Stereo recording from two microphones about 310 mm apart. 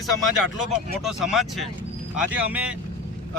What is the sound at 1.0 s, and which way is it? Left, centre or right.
Speech, centre.